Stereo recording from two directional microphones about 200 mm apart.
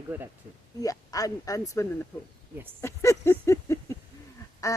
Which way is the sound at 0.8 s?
15° left (ahead or behind).